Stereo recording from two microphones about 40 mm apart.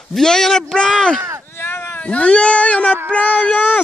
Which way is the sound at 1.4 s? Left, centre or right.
Left.